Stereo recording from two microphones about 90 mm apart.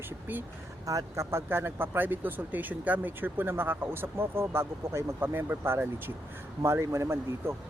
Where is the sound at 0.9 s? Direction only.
35° right (ahead or behind).